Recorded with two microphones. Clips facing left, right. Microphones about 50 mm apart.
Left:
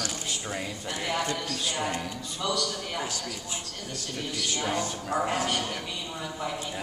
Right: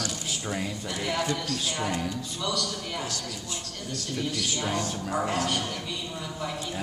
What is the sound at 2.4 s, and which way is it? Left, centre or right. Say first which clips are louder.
Speech: left 2 dB; centre.